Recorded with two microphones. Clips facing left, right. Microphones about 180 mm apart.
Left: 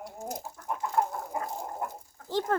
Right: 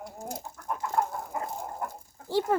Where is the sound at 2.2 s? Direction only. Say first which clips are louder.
Right 2 dB; 10° right (ahead or behind).